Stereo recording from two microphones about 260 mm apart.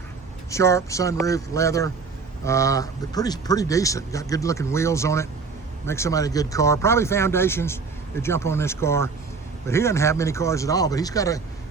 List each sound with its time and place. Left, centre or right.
0.5 s speech: centre